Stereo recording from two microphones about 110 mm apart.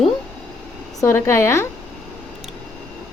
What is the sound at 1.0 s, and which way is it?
Speech, 25° left (ahead or behind).